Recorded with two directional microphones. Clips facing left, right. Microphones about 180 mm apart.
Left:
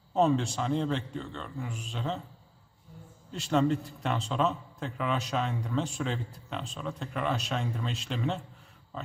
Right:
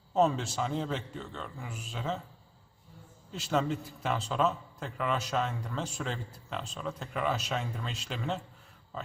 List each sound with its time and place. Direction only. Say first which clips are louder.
0.1 s a man's voice: left 2 dB; centre (ahead or behind)
3.3 s a man's voice: left 4 dB; centre (ahead or behind)